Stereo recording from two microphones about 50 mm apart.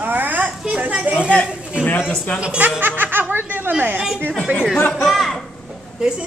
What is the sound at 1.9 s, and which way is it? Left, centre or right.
Speech, left.